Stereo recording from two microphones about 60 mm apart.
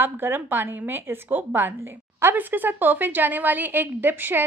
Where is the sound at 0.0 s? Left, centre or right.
Right.